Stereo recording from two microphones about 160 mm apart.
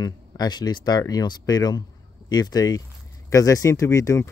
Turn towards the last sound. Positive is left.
turn(degrees=20)  # may be behind; listen again after turning